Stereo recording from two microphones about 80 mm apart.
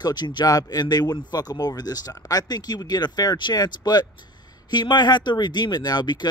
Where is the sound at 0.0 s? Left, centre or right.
Left.